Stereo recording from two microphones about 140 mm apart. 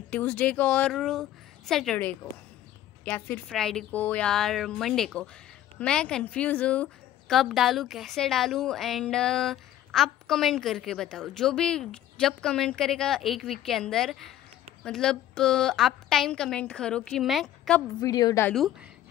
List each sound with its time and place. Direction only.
0.1 s a woman's voice: 10° left (ahead or behind)
3.1 s a woman's voice: 10° left (ahead or behind)
18.0 s a woman's voice: 25° left (ahead or behind)
18.5 s a woman's voice: centre (ahead or behind)